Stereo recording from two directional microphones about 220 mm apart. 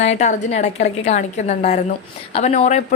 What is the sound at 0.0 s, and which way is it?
A woman's voice, 30° left (ahead or behind).